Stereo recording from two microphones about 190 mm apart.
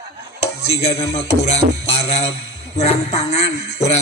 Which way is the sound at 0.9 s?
15° left (ahead or behind).